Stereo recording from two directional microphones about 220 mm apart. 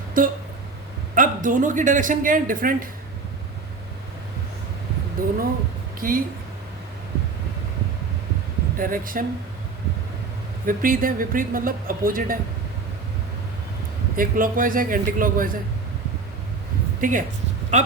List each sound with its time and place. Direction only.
0.2 s speech: 40° right (ahead or behind)
5.2 s speech: 40° right (ahead or behind)
8.8 s speech: 40° right (ahead or behind)
10.7 s speech: 40° right (ahead or behind)
14.2 s speech: 40° right (ahead or behind)
17.0 s speech: 35° right (ahead or behind)